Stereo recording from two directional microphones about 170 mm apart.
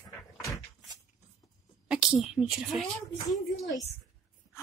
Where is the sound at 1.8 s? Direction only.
5° right (ahead or behind).